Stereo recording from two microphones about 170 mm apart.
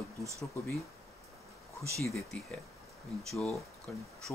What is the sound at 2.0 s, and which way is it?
Speech, 5° left (ahead or behind).